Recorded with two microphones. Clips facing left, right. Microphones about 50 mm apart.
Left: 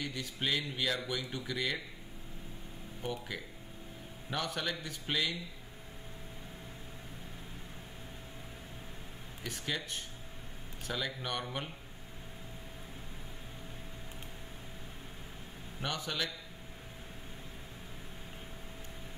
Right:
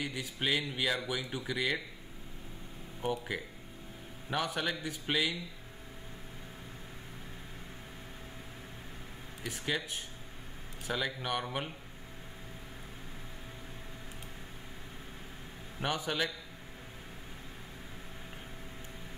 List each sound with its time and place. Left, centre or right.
0.0 s speech: centre
3.0 s speech: centre
9.4 s speech: centre
15.8 s a man's voice: centre